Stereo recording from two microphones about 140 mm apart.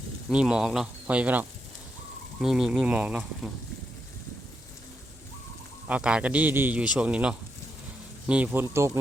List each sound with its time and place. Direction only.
0.3 s a man's voice: 5° right (ahead or behind)
5.9 s a man's voice: 5° right (ahead or behind)